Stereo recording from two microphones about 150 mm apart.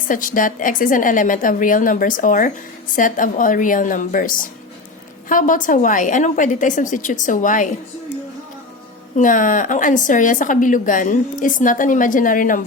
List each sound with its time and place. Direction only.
0.1 s a woman's voice: 65° left (ahead or behind)
9.1 s a woman's voice: 60° left (ahead or behind)